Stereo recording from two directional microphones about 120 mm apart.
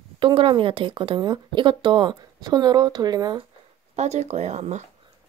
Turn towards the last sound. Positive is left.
turn(degrees=-75)  # may be behind; listen again after turning